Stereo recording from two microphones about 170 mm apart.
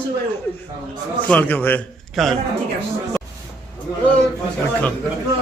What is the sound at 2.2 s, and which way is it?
Speech, centre (ahead or behind).